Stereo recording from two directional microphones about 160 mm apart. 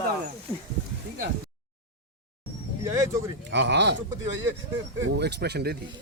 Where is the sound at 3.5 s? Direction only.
90° right.